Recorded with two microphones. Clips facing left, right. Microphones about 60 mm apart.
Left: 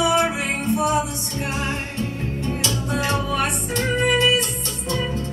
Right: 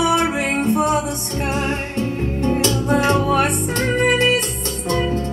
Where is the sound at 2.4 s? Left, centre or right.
Right.